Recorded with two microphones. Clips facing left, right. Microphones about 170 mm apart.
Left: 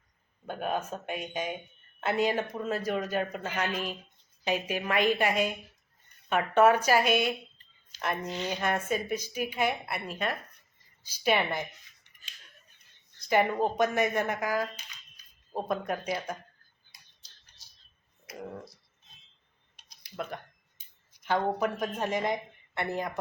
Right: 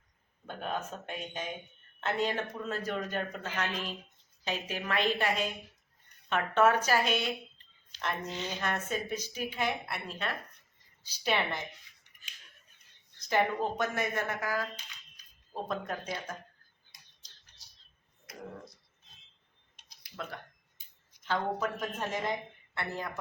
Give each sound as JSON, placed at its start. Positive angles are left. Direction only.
{"t": 0.4, "sound": "a woman's voice", "side_deg": 10}
{"t": 13.1, "sound": "a sound", "side_deg": 10}
{"t": 13.7, "sound": "a woman's voice", "side_deg": 20}
{"t": 15.7, "sound": "a woman's voice", "side_deg": 10}
{"t": 17.6, "sound": "a sound", "side_deg": 0}
{"t": 21.3, "sound": "a woman's voice", "side_deg": 15}